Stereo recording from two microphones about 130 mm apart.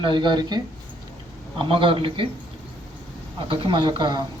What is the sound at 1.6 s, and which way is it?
Speech, 40° right (ahead or behind).